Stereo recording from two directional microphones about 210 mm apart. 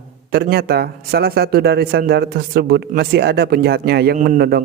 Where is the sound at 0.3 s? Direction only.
50° right (ahead or behind).